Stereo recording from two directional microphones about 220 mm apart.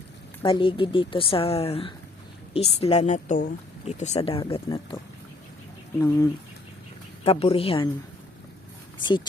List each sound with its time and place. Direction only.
0.4 s speech: 25° left (ahead or behind)
6.0 s speech: 15° left (ahead or behind)
7.3 s speech: 25° left (ahead or behind)